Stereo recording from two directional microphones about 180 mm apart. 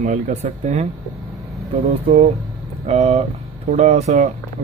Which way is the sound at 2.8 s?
35° right (ahead or behind).